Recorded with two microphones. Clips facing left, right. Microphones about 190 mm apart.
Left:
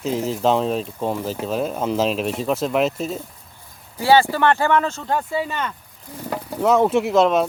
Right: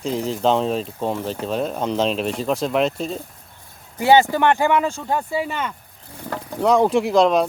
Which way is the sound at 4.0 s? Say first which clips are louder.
Right 1 dB; 20° right (ahead or behind).